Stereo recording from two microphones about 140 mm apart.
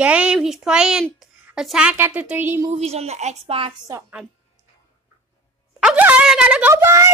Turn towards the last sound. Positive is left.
turn(degrees=-20)  # may be behind; listen again after turning